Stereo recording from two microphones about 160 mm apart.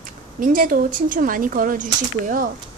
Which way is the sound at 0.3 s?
55° right (ahead or behind).